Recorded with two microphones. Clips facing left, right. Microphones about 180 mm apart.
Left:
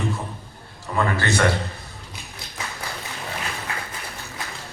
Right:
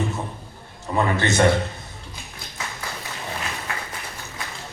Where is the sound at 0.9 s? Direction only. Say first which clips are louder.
Right 2 dB; 20° right (ahead or behind).